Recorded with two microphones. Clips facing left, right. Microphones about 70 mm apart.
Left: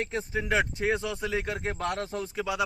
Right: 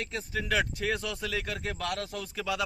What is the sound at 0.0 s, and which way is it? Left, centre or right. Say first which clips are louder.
Speech: left 4 dB; left.